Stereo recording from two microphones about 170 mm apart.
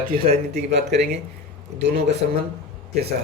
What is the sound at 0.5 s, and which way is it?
Speech, 75° right (ahead or behind).